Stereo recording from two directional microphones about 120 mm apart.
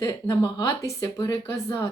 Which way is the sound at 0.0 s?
25° left (ahead or behind).